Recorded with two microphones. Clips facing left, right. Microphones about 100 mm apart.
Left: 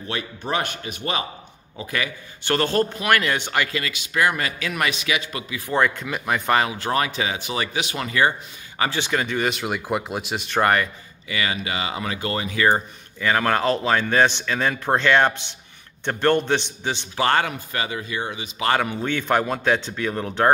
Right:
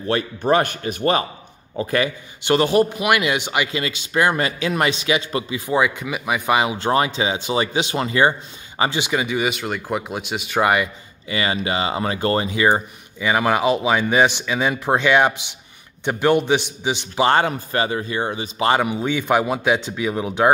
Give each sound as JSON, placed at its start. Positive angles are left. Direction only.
{"t": 0.1, "sound": "a man's voice", "side_deg": -45}
{"t": 2.4, "sound": "speech", "side_deg": -15}
{"t": 5.7, "sound": "speech", "side_deg": -10}
{"t": 6.8, "sound": "speech", "side_deg": -25}
{"t": 9.0, "sound": "speech", "side_deg": -10}
{"t": 11.2, "sound": "speech", "side_deg": -30}
{"t": 12.4, "sound": "speech", "side_deg": -15}
{"t": 18.7, "sound": "speech", "side_deg": -15}